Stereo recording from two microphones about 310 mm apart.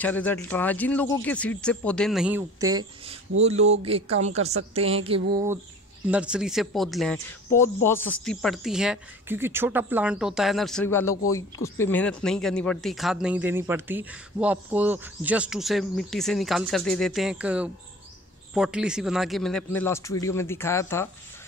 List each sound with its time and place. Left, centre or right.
0.0 s speech: centre
3.3 s speech: right
3.7 s a woman's voice: centre
5.1 s a sound: centre
6.0 s speech: centre